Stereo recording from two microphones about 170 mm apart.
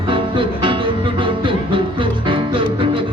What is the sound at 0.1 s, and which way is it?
Music, 30° right (ahead or behind).